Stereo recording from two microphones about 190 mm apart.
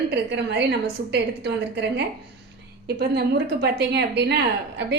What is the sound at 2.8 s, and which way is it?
A woman's voice, 55° right (ahead or behind).